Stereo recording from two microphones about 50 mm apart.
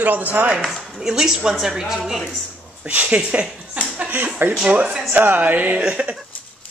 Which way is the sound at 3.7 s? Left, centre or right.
Right.